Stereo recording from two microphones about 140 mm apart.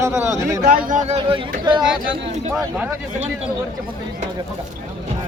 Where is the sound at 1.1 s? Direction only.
40° right (ahead or behind).